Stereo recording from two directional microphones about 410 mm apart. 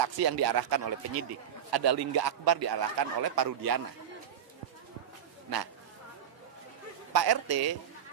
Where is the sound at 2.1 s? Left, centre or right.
Right.